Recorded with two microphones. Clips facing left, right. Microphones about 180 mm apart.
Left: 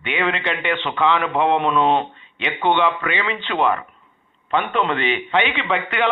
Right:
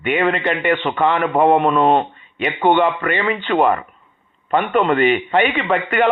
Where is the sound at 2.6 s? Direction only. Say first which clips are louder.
Right 3 dB; 45° right (ahead or behind).